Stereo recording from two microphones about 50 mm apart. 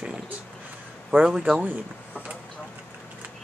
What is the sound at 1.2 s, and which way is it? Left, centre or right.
Speech, centre.